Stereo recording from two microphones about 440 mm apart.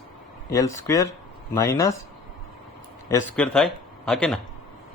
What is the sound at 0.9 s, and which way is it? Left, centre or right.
Speech, centre.